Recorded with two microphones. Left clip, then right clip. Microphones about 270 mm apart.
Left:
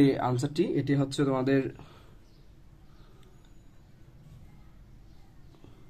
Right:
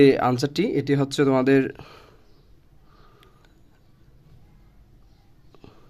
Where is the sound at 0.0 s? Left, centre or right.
Right.